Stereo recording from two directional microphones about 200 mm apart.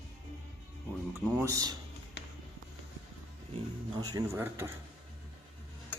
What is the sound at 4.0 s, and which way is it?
Speech, 20° right (ahead or behind).